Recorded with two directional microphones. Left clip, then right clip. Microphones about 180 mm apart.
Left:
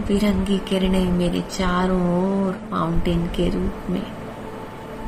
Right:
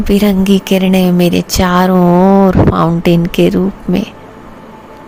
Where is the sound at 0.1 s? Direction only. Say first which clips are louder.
Right 11 dB; 60° right (ahead or behind).